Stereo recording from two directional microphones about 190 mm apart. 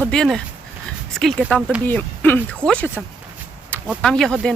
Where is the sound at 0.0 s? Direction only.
5° left (ahead or behind).